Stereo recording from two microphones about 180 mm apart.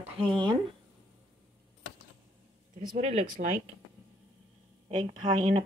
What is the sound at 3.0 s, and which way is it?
Speech, 35° right (ahead or behind).